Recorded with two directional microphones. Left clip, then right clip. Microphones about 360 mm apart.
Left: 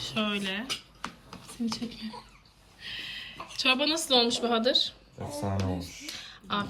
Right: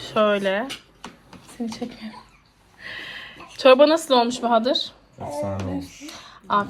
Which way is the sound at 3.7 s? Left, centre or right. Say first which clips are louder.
Right 10 dB; centre.